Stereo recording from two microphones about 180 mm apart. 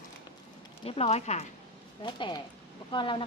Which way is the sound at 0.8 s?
35° left (ahead or behind).